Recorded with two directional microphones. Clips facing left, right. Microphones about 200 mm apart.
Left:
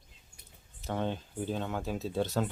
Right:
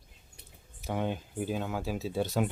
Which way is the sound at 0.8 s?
10° right (ahead or behind).